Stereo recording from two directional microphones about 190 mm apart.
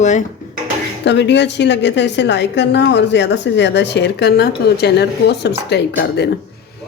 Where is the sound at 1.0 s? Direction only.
65° left (ahead or behind).